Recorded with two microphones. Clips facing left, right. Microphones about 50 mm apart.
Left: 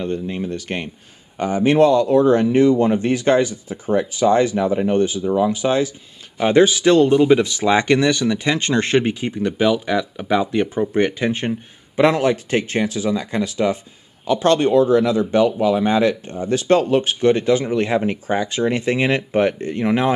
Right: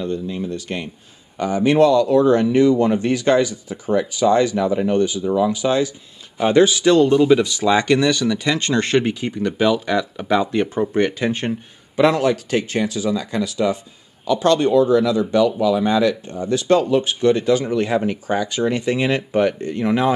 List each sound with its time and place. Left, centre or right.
0.0 s speech: left
7.1 s speech: centre
12.1 s speech: left